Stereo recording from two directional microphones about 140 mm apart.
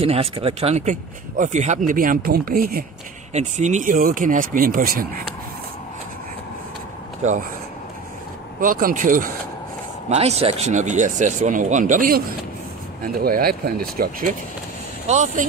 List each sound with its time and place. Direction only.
0.0 s speech: 45° right (ahead or behind); by 2.8 s 90° right
3.3 s speech: 55° right (ahead or behind); by 5.2 s 90° right
8.5 s speech: 85° right
10.0 s speech: 50° right (ahead or behind); by 14.3 s 90° right
15.0 s speech: 60° right (ahead or behind)